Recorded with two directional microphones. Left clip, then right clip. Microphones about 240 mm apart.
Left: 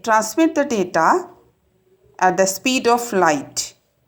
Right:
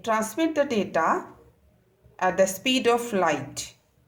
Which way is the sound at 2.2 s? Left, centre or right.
Left.